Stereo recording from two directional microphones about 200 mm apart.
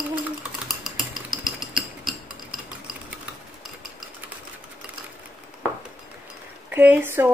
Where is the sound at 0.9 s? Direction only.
Centre (ahead or behind).